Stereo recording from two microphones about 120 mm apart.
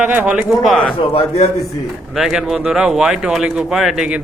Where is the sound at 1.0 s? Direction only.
60° left (ahead or behind).